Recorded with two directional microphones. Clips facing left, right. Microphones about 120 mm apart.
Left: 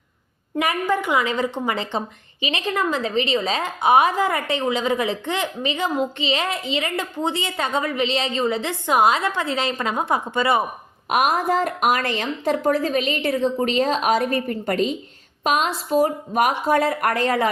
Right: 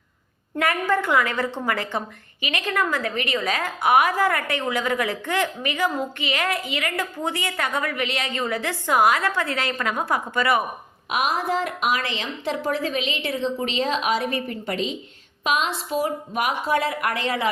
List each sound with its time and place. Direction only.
0.6 s a woman's voice: 15° left (ahead or behind)
11.1 s a woman's voice: 50° left (ahead or behind)